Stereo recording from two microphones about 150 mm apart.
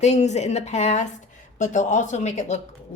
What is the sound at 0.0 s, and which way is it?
Speech, 50° left (ahead or behind).